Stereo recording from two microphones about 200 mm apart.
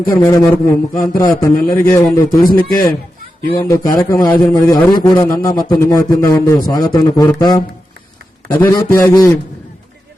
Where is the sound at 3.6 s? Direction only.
20° left (ahead or behind).